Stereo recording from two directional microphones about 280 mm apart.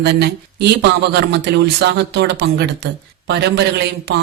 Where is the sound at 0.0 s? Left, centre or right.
Right.